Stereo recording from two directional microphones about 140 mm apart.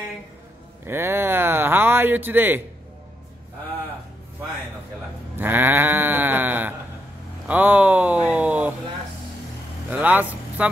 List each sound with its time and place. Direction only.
0.8 s speech: 15° right (ahead or behind)
5.3 s sheep: 15° right (ahead or behind)
7.4 s a sound: 10° right (ahead or behind)
9.8 s vehicle: 10° right (ahead or behind)